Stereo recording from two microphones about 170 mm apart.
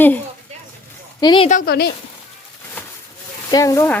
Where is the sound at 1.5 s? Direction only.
55° left (ahead or behind).